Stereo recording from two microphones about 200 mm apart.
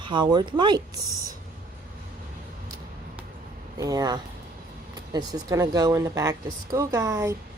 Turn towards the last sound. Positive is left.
turn(degrees=-15)  # may be behind; listen again after turning